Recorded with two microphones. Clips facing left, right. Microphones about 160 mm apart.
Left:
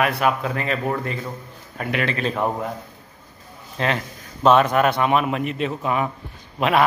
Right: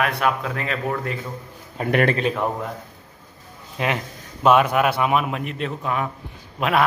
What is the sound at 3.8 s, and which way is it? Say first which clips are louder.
A man's voice: left 1 dB; 10° right (ahead or behind).